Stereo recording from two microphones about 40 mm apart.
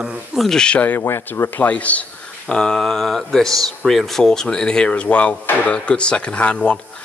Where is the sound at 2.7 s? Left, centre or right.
Centre.